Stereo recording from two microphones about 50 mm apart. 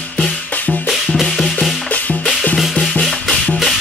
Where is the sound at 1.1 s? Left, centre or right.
Centre.